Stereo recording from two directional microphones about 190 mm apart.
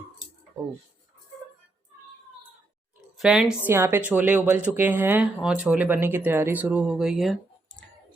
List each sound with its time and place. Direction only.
3.2 s a woman's voice: 5° right (ahead or behind)